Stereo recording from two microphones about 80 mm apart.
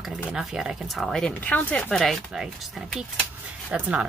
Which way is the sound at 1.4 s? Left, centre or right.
Centre.